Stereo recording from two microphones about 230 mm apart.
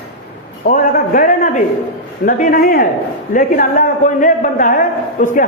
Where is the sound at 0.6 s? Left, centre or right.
Left.